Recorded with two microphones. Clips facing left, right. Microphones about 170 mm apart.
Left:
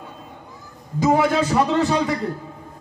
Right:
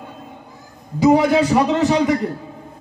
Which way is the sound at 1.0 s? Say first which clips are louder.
Right 4 dB; 15° right (ahead or behind).